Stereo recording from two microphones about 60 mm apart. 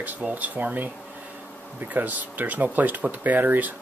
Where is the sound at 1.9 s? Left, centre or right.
Right.